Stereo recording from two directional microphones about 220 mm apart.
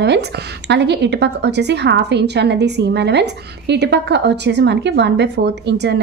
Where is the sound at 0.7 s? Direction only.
50° right (ahead or behind).